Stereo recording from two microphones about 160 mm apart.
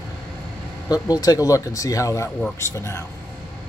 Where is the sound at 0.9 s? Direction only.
25° left (ahead or behind).